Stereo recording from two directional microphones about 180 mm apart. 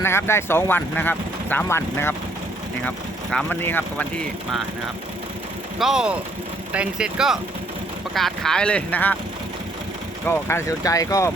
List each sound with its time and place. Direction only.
0.0 s speech: 15° left (ahead or behind)
3.3 s speech: 10° left (ahead or behind)
5.8 s speech: 5° right (ahead or behind)
10.2 s speech: 15° left (ahead or behind)